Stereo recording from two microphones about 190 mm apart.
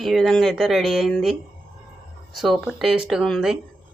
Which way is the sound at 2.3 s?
Centre (ahead or behind).